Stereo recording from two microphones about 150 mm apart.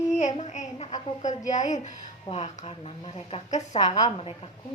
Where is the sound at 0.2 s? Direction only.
50° left (ahead or behind).